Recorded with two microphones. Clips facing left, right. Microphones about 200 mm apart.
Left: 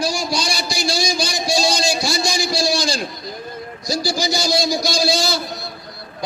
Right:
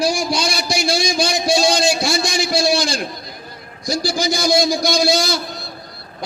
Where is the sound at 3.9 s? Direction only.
55° right (ahead or behind).